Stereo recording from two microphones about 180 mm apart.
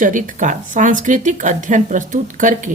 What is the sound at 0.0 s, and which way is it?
Speech, 45° right (ahead or behind).